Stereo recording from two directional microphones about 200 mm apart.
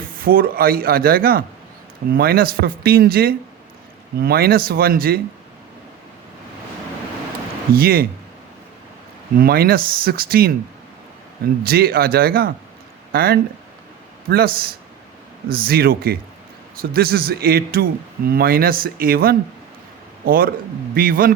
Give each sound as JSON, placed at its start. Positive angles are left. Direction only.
{"t": 0.2, "sound": "speech", "side_deg": -45}
{"t": 7.8, "sound": "speech", "side_deg": -50}
{"t": 9.4, "sound": "speech", "side_deg": -50}
{"t": 11.6, "sound": "speech", "side_deg": -50}